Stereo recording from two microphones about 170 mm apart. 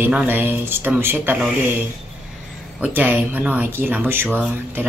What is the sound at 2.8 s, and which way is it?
A woman's voice, 10° right (ahead or behind).